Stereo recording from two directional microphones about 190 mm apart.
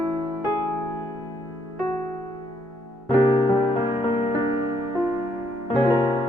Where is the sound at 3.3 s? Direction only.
25° left (ahead or behind).